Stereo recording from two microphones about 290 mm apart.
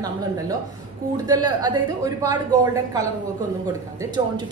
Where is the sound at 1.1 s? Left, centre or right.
Centre.